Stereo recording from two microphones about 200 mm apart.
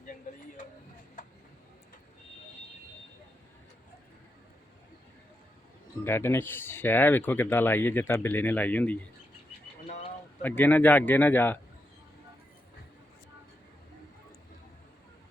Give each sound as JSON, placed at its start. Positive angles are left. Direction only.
{"t": 0.0, "sound": "a sound", "side_deg": 40}
{"t": 6.1, "sound": "speech", "side_deg": 10}
{"t": 10.4, "sound": "speech", "side_deg": 10}